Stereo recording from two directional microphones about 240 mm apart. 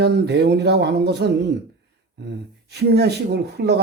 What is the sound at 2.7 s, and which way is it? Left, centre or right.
Speech, right.